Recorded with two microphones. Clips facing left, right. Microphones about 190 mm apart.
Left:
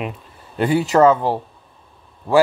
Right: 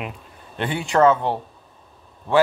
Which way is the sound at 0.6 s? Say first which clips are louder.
Left 8 dB; 40° left (ahead or behind).